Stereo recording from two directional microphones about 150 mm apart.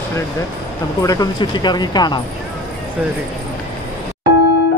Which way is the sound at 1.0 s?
25° left (ahead or behind).